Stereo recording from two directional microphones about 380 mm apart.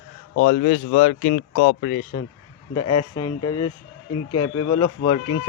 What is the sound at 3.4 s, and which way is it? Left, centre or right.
Speech, left.